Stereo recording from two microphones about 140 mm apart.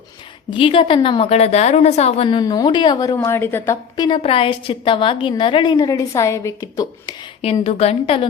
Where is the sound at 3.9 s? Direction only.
30° left (ahead or behind).